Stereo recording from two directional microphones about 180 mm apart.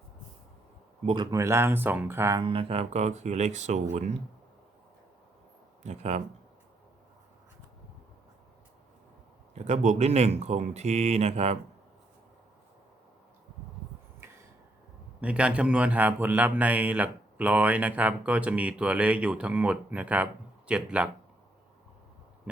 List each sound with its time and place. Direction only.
1.0 s speech: 25° right (ahead or behind)
2.4 s speech: 30° right (ahead or behind)
5.8 s speech: 40° right (ahead or behind)
9.6 s speech: 40° right (ahead or behind)
14.2 s a sound: 15° right (ahead or behind)
15.2 s speech: 5° right (ahead or behind)